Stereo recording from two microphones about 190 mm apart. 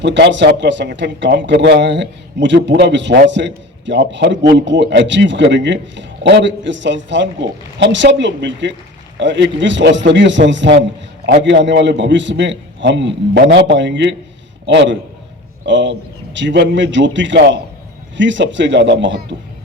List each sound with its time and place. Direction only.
0.0 s speech: 70° right (ahead or behind)